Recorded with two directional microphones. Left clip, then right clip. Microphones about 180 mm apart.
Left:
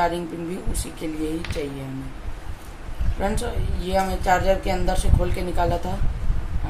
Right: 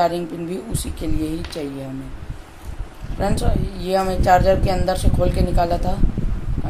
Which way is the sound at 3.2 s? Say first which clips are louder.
Right 3 dB; 35° right (ahead or behind).